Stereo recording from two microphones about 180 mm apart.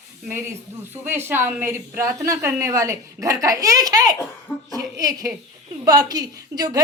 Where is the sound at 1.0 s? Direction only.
10° right (ahead or behind).